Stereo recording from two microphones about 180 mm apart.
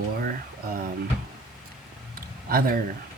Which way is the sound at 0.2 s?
55° right (ahead or behind).